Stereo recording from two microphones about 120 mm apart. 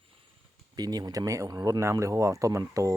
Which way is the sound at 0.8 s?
35° right (ahead or behind).